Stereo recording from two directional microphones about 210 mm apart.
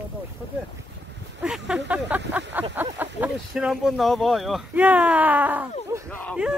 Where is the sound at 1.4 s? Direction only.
5° right (ahead or behind).